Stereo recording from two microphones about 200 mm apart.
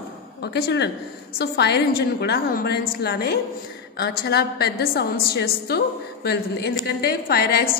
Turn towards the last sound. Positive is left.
turn(degrees=50)  # may be behind; listen again after turning